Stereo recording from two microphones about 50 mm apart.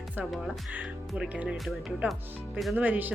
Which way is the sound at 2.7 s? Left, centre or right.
Right.